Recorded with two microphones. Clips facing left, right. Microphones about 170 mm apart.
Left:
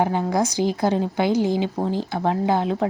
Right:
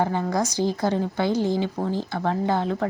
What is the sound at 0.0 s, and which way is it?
A woman's voice, 15° left (ahead or behind).